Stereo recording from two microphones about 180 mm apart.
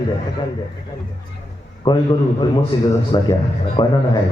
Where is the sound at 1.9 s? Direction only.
25° left (ahead or behind).